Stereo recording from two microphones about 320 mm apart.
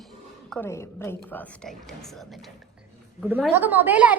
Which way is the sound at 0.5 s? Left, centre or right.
Centre.